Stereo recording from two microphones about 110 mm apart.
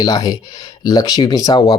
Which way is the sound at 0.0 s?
35° left (ahead or behind).